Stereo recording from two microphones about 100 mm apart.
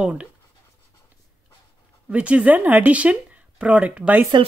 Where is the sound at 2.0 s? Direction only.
15° right (ahead or behind).